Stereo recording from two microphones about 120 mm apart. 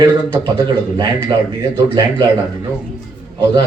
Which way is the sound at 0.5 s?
40° right (ahead or behind).